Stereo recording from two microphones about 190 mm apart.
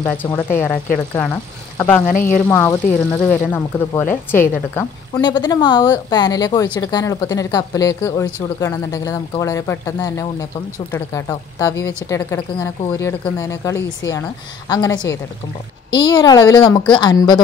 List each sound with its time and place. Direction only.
0.0 s a woman's voice: 10° left (ahead or behind)
2.1 s speech: 45° left (ahead or behind)
2.4 s a woman's voice: 10° left (ahead or behind)
5.2 s a woman's voice: 20° left (ahead or behind)